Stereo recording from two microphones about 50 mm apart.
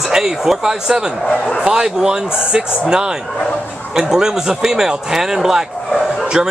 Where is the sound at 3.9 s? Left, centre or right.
Centre.